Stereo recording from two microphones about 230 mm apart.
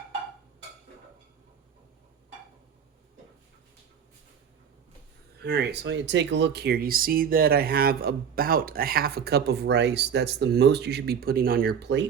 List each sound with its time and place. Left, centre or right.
5.4 s speech: right